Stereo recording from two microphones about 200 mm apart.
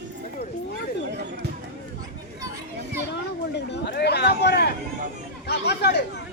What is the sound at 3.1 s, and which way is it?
Speech, 60° left (ahead or behind).